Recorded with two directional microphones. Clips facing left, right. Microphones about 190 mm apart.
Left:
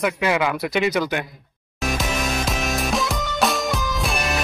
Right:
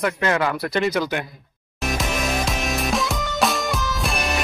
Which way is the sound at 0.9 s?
5° left (ahead or behind).